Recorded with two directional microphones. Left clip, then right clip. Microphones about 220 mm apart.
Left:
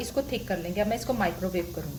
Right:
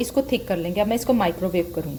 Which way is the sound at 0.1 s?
35° right (ahead or behind).